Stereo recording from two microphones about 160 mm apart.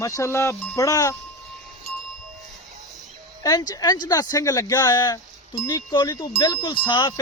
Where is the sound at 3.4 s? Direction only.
25° left (ahead or behind).